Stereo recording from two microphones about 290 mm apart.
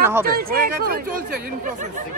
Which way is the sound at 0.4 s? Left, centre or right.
Right.